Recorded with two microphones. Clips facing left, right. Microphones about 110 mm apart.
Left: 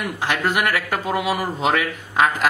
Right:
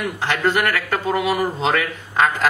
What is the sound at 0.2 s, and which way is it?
A man's voice, 15° left (ahead or behind).